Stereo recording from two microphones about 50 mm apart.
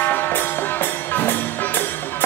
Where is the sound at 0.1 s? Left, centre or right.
Left.